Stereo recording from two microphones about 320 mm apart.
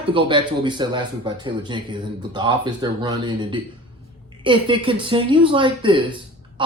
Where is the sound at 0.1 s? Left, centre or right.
Centre.